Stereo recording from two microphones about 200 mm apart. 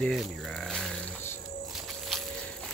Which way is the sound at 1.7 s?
Centre (ahead or behind).